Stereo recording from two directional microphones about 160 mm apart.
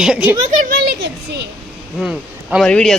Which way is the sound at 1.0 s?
90° right.